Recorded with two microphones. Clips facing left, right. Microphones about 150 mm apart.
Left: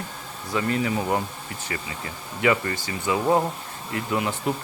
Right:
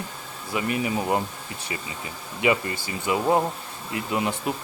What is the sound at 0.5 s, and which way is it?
Speech, 20° right (ahead or behind).